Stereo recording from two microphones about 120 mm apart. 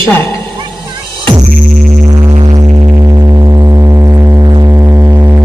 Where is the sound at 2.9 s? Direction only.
35° right (ahead or behind).